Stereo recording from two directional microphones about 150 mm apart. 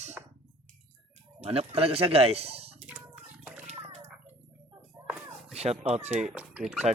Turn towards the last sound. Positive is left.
turn(degrees=-5)  # may be behind; listen again after turning